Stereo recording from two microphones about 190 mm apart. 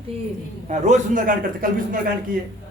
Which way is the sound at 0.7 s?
40° right (ahead or behind).